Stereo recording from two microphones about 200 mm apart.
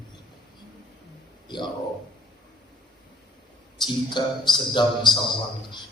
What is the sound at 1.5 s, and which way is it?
Speech, 20° left (ahead or behind).